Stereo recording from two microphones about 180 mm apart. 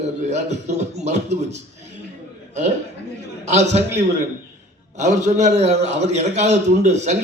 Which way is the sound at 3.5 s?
40° right (ahead or behind).